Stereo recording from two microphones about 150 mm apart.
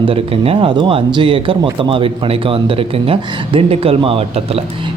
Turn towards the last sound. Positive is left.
turn(degrees=-40)  # may be behind; listen again after turning